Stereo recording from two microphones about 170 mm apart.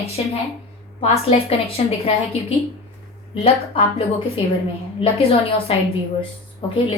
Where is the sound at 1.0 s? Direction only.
35° left (ahead or behind).